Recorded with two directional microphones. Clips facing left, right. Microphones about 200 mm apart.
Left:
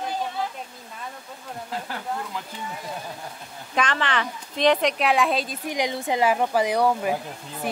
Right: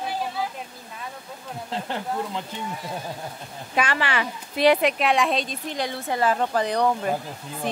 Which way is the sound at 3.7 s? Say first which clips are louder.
Even; 10° right (ahead or behind).